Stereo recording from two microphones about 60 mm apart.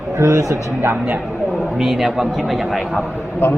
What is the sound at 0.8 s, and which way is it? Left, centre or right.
Speech, right.